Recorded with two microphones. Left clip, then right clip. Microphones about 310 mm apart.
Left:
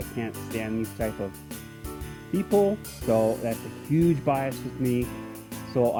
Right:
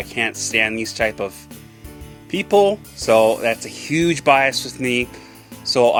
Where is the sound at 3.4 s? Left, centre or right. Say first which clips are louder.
Right 10 dB; centre.